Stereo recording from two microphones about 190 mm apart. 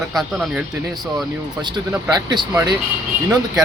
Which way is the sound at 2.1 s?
20° right (ahead or behind).